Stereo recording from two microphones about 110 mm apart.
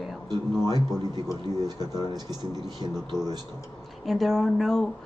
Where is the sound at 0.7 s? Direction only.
40° right (ahead or behind).